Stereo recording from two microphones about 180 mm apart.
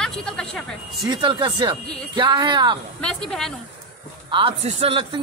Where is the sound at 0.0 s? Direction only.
5° left (ahead or behind).